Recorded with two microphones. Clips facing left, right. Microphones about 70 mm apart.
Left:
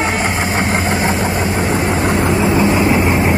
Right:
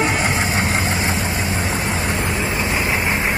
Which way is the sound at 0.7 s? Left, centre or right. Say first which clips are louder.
Left 5 dB; left.